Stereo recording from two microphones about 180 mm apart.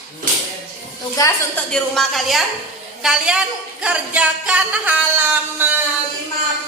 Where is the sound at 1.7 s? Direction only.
Centre (ahead or behind).